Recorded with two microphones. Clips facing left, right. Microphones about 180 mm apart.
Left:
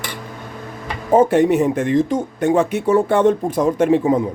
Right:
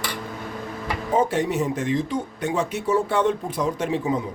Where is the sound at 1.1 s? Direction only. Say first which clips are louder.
Left 9 dB; 50° left (ahead or behind).